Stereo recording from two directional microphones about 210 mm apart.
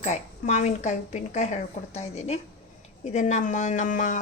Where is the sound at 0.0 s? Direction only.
35° left (ahead or behind).